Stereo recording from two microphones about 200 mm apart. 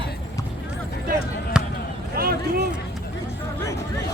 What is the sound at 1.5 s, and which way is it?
Basketball bounce, 5° right (ahead or behind).